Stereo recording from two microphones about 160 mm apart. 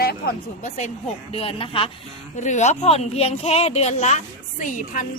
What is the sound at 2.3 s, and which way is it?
A woman's voice, 45° left (ahead or behind).